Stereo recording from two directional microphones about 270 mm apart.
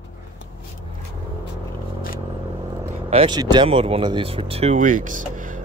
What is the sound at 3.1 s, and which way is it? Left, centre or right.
Speech, centre.